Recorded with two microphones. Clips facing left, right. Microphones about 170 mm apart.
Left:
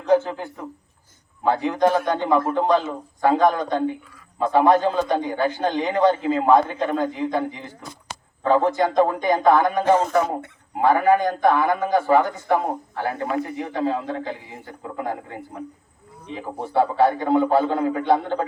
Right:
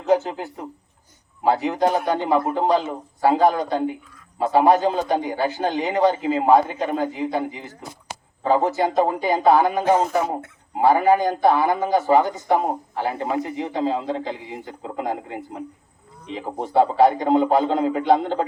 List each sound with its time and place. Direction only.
0.3 s a man's voice: 15° right (ahead or behind)
1.6 s a man's voice: 20° right (ahead or behind)